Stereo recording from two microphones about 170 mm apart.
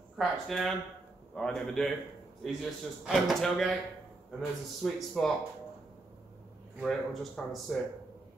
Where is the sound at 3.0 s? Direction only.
Centre (ahead or behind).